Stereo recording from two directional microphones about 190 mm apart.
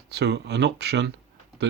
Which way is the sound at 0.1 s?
60° right (ahead or behind).